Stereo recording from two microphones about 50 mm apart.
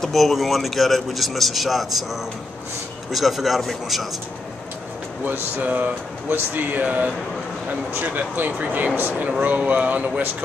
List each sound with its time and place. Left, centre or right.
0.0 s a man's voice: centre
3.1 s a man's voice: centre
5.6 s speech: right